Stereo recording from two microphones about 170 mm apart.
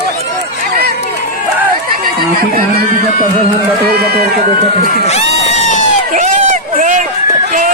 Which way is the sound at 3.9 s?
70° right (ahead or behind).